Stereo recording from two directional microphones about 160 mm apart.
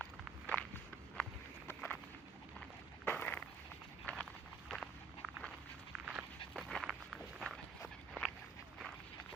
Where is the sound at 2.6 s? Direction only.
10° left (ahead or behind).